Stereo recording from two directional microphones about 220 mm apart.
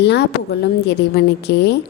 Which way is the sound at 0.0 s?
50° left (ahead or behind).